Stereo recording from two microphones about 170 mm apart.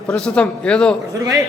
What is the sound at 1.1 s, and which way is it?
Speech, 20° right (ahead or behind).